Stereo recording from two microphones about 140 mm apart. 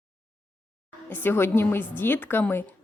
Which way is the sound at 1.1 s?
15° left (ahead or behind).